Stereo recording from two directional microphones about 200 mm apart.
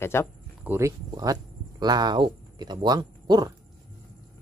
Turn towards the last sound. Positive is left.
turn(degrees=-20)  # may be behind; listen again after turning